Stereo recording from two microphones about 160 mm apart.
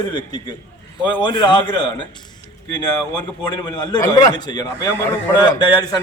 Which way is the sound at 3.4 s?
25° left (ahead or behind).